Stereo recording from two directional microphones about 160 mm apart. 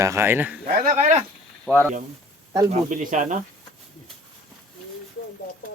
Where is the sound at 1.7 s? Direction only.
Centre (ahead or behind).